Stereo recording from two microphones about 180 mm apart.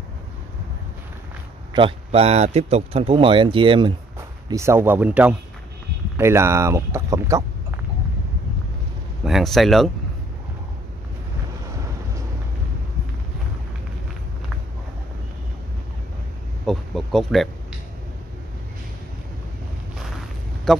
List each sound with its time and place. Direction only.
1.7 s speech: 30° right (ahead or behind)
4.5 s speech: 15° right (ahead or behind)
9.2 s speech: centre (ahead or behind)
16.6 s speech: centre (ahead or behind)
20.7 s speech: 5° left (ahead or behind)